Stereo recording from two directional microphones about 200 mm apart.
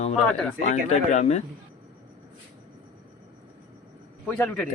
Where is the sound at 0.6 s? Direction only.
35° left (ahead or behind).